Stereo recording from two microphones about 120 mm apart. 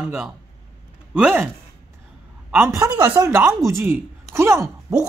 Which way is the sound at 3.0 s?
25° right (ahead or behind).